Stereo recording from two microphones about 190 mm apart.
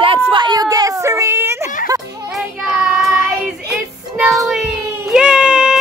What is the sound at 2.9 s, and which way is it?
Child singing, centre (ahead or behind).